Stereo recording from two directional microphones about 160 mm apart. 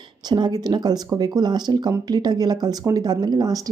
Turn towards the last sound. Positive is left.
turn(degrees=-25)  # may be behind; listen again after turning